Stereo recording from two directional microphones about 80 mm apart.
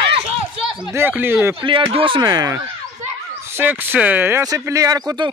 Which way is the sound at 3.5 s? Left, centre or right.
Right.